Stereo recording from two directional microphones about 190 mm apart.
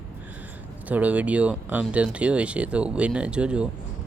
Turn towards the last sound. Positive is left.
turn(degrees=-5)  # may be behind; listen again after turning